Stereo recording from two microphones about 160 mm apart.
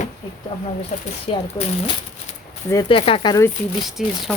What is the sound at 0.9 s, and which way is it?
Speech, 50° left (ahead or behind).